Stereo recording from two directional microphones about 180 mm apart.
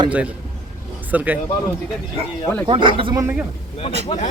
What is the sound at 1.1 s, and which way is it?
Speech, 10° right (ahead or behind).